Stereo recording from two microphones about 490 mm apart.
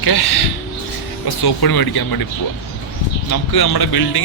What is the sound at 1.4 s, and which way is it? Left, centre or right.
Speech, left.